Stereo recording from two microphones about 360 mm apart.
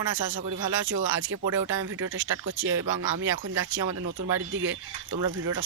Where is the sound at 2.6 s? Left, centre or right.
Right.